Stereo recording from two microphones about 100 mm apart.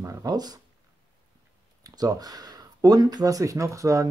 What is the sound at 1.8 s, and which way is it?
Speech, 40° right (ahead or behind).